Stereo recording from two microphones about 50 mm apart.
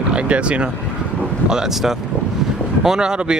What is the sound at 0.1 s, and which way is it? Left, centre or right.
Speech, right.